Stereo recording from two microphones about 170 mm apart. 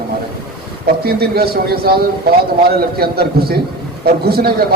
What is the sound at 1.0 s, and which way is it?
A man's voice, 65° right (ahead or behind).